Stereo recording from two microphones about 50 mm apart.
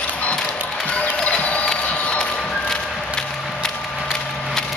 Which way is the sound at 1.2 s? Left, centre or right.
Left.